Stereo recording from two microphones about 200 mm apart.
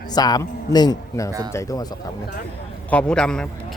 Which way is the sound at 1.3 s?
20° right (ahead or behind).